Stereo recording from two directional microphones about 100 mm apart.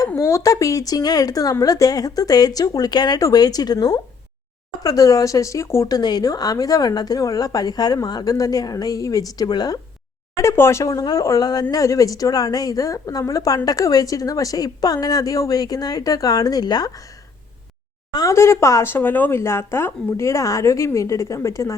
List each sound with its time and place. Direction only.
0.2 s speech: 30° left (ahead or behind)
5.9 s speech: 45° left (ahead or behind)
10.3 s speech: 25° left (ahead or behind); by 17.0 s 40° left (ahead or behind)
18.1 s a woman's voice: 40° left (ahead or behind)
18.3 s speech: 25° left (ahead or behind)